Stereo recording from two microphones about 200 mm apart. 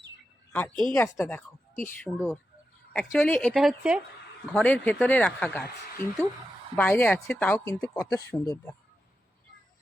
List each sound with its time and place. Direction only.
0.5 s speech: 10° left (ahead or behind)
2.9 s speech: 10° left (ahead or behind)
7.9 s speech: 20° left (ahead or behind)